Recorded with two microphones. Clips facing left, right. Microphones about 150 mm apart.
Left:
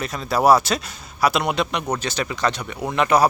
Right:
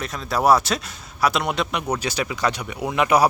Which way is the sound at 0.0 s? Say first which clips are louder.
Left 2 dB; centre (ahead or behind).